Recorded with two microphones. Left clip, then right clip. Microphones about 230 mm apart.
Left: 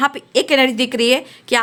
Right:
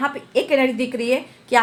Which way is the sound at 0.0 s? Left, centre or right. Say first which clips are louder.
Left 4 dB; left.